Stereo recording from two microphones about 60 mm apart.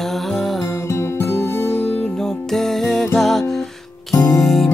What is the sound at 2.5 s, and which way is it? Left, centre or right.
Music, centre.